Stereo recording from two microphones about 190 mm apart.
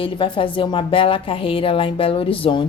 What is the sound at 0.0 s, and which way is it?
A woman's voice, 25° left (ahead or behind).